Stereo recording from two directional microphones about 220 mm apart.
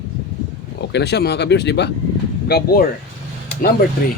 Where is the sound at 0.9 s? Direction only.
50° left (ahead or behind).